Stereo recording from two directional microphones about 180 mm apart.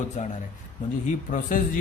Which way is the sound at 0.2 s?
40° left (ahead or behind).